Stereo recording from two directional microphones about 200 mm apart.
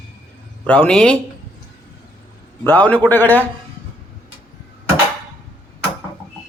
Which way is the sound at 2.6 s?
10° left (ahead or behind).